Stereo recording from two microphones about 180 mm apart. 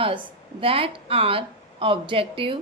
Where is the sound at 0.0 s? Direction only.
30° right (ahead or behind).